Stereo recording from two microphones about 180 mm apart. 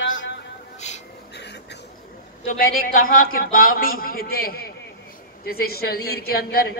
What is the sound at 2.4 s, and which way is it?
A man's voice, 50° left (ahead or behind).